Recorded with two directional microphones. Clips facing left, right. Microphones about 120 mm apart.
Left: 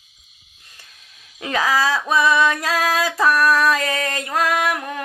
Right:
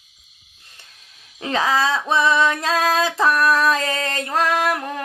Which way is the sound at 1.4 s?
25° right (ahead or behind).